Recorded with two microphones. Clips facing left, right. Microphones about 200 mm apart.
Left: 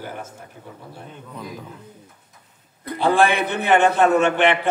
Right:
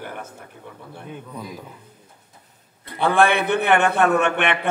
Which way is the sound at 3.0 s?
60° right (ahead or behind).